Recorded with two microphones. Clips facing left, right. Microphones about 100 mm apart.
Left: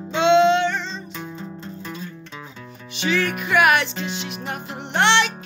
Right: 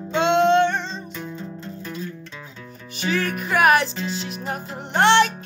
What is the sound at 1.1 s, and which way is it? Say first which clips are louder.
Music: even; 10° left (ahead or behind).